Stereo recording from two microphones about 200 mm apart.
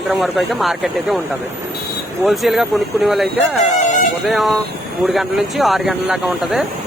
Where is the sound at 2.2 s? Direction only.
Centre (ahead or behind).